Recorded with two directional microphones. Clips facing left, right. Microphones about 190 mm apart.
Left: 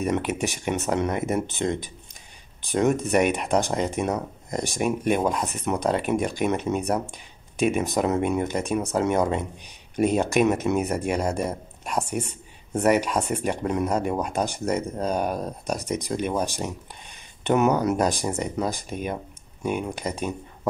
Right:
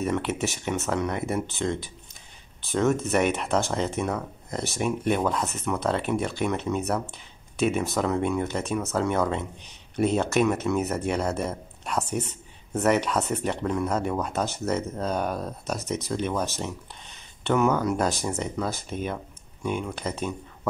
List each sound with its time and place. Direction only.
0.0 s speech: 15° left (ahead or behind)